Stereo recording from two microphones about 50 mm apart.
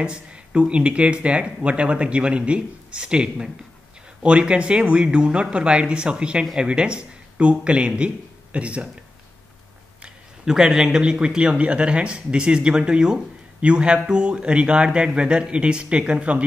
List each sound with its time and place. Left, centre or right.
0.0 s speech: centre
10.0 s speech: centre